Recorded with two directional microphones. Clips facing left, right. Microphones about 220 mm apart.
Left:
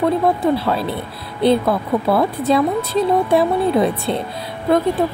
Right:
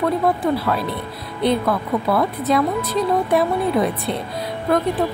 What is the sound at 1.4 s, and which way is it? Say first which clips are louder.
Speech: left 4 dB; 30° left (ahead or behind).